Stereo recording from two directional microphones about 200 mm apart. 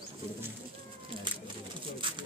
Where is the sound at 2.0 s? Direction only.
25° right (ahead or behind).